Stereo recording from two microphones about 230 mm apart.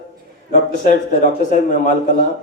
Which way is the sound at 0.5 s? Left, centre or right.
Left.